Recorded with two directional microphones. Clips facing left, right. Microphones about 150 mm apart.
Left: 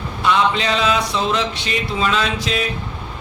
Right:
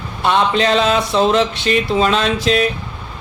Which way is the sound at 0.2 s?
50° right (ahead or behind).